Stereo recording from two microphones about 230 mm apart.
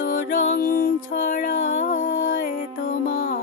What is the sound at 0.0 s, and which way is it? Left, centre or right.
Music, left.